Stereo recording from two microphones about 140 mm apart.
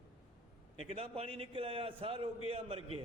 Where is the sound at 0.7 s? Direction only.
45° right (ahead or behind).